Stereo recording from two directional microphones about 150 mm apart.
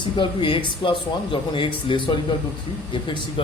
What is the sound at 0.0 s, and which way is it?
Speech, 35° left (ahead or behind).